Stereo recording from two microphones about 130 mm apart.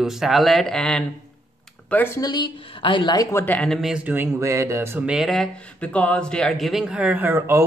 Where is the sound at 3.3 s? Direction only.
15° left (ahead or behind).